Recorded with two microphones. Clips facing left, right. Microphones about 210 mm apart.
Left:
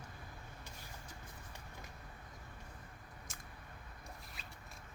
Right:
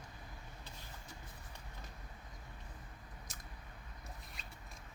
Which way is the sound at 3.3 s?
35° right (ahead or behind).